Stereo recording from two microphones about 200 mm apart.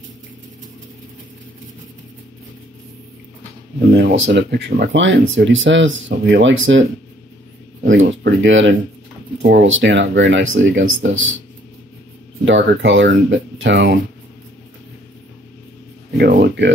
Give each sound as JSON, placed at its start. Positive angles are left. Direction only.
{"t": 3.9, "sound": "speech", "side_deg": -60}
{"t": 7.9, "sound": "speech", "side_deg": -65}
{"t": 12.4, "sound": "speech", "side_deg": -70}
{"t": 16.2, "sound": "speech", "side_deg": -55}